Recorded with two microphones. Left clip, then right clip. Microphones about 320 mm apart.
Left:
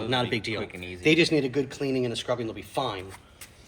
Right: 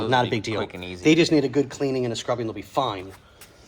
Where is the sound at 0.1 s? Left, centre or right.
Right.